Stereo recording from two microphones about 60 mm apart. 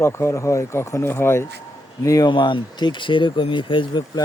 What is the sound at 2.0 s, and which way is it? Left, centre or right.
Speech, left.